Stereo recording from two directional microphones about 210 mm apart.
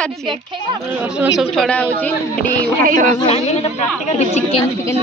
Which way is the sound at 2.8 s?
40° right (ahead or behind).